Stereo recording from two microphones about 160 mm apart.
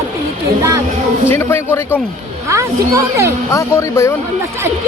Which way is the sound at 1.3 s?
15° left (ahead or behind).